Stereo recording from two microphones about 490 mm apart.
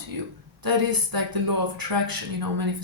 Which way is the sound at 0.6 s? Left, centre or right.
Right.